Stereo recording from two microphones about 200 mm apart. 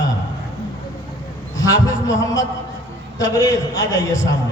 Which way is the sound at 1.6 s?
15° left (ahead or behind).